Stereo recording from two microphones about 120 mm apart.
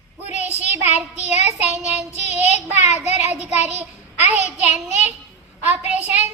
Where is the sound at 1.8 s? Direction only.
65° left (ahead or behind).